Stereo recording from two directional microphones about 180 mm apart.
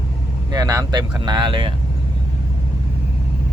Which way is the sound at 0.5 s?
20° right (ahead or behind).